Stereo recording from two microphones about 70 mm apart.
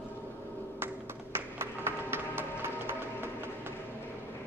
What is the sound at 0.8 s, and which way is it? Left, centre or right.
Music, right.